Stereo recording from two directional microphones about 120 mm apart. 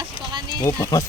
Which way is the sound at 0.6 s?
25° left (ahead or behind).